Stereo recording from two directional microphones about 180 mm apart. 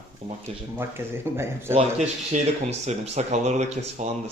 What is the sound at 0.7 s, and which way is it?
Speech, 10° right (ahead or behind).